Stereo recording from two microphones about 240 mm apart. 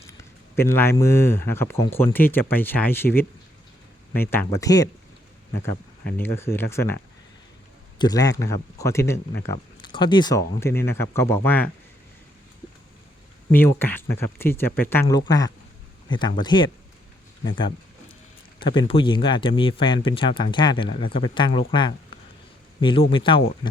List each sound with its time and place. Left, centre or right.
0.5 s speech: centre
6.2 s speech: centre
13.5 s speech: centre